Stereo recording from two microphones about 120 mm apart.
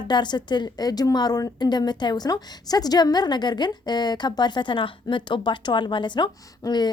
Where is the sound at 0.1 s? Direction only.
40° left (ahead or behind).